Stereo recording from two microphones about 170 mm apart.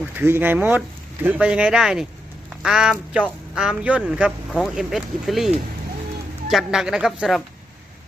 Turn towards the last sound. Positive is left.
turn(degrees=0)  # may be behind; listen again after turning